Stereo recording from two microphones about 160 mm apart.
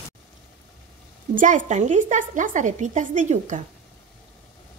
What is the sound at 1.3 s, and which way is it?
A woman's voice, 55° right (ahead or behind).